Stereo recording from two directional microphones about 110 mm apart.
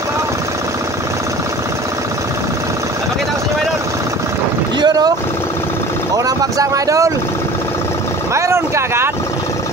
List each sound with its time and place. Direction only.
4.7 s vehicle: 40° right (ahead or behind)
6.1 s vehicle: 35° right (ahead or behind)
8.4 s vehicle: 25° right (ahead or behind)